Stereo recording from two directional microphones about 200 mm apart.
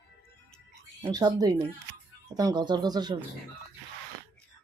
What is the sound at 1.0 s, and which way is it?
Speech, 20° right (ahead or behind).